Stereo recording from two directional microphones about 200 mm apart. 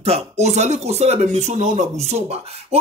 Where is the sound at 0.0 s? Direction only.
35° right (ahead or behind).